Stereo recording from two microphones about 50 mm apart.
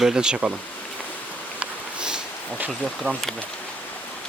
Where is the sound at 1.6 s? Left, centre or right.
Centre.